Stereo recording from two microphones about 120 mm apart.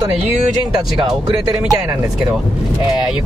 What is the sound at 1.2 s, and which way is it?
Speech, 30° right (ahead or behind).